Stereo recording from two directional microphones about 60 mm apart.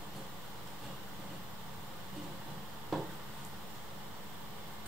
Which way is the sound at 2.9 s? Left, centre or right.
Centre.